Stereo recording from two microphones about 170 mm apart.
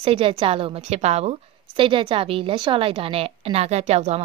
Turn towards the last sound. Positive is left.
turn(degrees=-40)  # may be behind; listen again after turning